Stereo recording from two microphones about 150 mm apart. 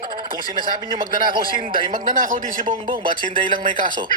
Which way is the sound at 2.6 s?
35° right (ahead or behind).